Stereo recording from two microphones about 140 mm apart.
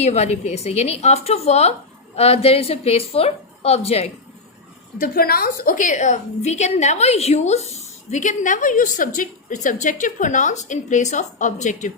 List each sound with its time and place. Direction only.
0.0 s a woman's voice: 50° left (ahead or behind)
4.9 s a woman's voice: 90° left; by 11.9 s 60° left (ahead or behind)